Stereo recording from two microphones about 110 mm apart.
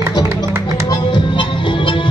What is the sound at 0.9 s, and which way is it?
Music, 45° left (ahead or behind).